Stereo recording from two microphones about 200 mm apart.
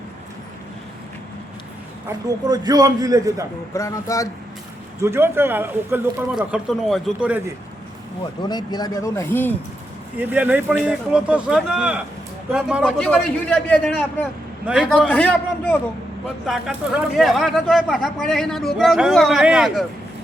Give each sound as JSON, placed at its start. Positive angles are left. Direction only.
{"t": 2.0, "sound": "speech", "side_deg": -20}
{"t": 3.8, "sound": "speech", "side_deg": 15}
{"t": 4.9, "sound": "speech", "side_deg": -15}
{"t": 8.4, "sound": "speech", "side_deg": 20}
{"t": 10.2, "sound": "speech", "side_deg": -10}
{"t": 16.5, "sound": "speech", "side_deg": 0}